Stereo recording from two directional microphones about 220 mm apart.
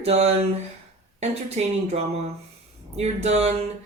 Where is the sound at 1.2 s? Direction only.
30° right (ahead or behind).